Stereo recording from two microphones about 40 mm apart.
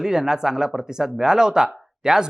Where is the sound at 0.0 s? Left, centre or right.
Centre.